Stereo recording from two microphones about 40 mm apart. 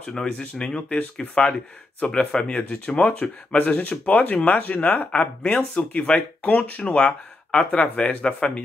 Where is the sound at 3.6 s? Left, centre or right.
Left.